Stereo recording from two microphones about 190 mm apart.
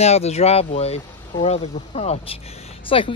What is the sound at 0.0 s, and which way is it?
Speech, 35° left (ahead or behind).